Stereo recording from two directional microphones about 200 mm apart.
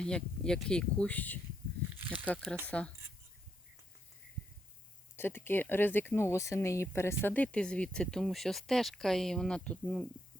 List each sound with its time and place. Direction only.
0.0 s speech: 5° left (ahead or behind)
2.0 s snake: 10° right (ahead or behind)
2.6 s speech: 5° left (ahead or behind)
5.1 s speech: 10° left (ahead or behind)